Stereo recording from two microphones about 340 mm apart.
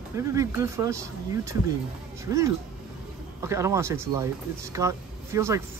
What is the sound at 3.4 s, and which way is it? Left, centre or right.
Speech, centre.